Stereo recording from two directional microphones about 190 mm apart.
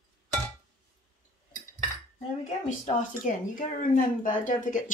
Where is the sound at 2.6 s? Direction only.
40° left (ahead or behind).